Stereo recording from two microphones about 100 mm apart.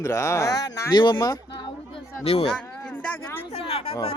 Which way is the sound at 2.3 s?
70° left (ahead or behind).